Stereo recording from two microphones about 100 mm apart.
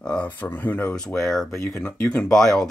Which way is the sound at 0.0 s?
15° left (ahead or behind).